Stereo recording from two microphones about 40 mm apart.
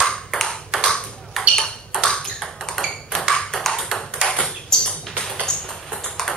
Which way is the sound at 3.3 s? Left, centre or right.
Centre.